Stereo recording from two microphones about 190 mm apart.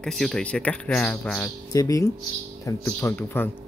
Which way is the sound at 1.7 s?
15° left (ahead or behind).